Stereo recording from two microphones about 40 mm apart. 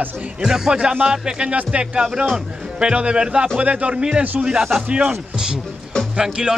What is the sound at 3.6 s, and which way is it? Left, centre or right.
Music, right.